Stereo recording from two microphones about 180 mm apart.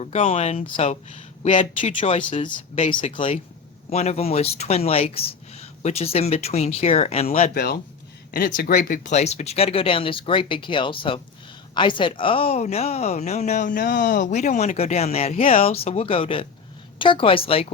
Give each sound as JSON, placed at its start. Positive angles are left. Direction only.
{"t": 0.0, "sound": "a woman's voice", "side_deg": 35}
{"t": 1.9, "sound": "speech", "side_deg": 30}
{"t": 3.1, "sound": "a woman's voice", "side_deg": 30}
{"t": 7.5, "sound": "a woman's voice", "side_deg": 60}